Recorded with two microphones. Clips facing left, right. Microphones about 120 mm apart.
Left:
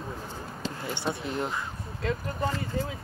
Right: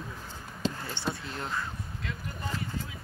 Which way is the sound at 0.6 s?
20° right (ahead or behind).